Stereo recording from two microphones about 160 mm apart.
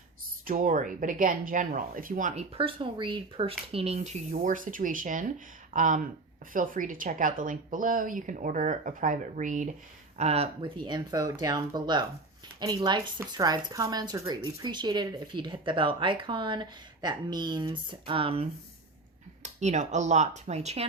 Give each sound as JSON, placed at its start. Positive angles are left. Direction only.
{"t": 0.4, "sound": "a woman's voice", "side_deg": -55}
{"t": 10.2, "sound": "speech", "side_deg": -40}
{"t": 19.4, "sound": "speech", "side_deg": -45}